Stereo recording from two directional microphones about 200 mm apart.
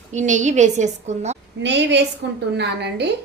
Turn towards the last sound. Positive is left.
turn(degrees=-55)  # may be behind; listen again after turning